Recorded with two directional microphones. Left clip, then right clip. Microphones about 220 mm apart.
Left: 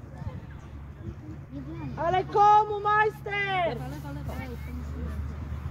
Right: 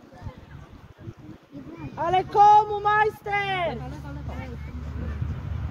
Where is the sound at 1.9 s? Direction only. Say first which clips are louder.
Right 4 dB; 50° right (ahead or behind).